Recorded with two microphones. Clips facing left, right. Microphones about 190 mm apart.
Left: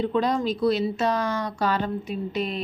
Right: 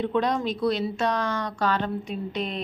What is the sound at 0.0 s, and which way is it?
Speech, centre (ahead or behind).